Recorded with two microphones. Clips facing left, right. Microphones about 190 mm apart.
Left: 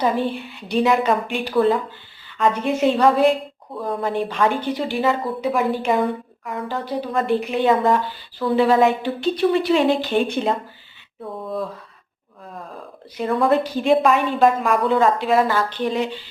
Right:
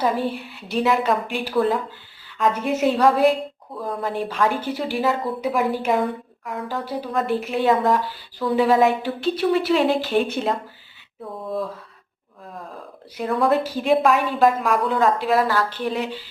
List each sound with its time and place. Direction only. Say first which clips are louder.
0.0 s a woman's voice: left 1 dB; 5° right (ahead or behind)
13.1 s a woman's voice: left 2 dB; centre (ahead or behind)